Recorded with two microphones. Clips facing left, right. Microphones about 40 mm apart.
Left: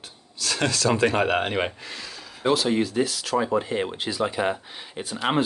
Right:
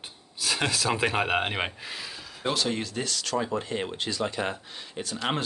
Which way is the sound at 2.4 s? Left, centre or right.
Centre.